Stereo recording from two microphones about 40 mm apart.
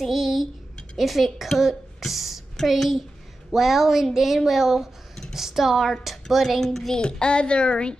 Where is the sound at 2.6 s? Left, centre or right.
Centre.